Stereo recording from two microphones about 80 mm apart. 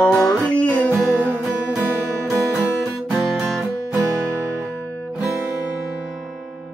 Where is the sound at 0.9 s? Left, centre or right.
Right.